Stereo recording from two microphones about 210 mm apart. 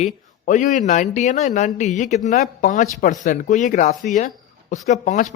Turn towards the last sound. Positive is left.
turn(degrees=35)  # may be behind; listen again after turning